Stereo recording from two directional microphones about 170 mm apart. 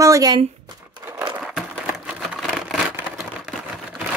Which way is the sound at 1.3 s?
5° right (ahead or behind).